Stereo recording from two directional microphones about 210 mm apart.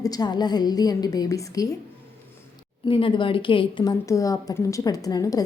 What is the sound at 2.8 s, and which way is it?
A woman's voice, 25° left (ahead or behind).